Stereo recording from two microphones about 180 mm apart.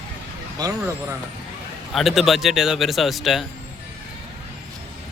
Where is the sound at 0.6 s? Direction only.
20° right (ahead or behind).